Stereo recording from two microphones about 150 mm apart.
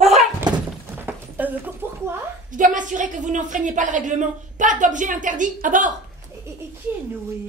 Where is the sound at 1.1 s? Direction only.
10° right (ahead or behind).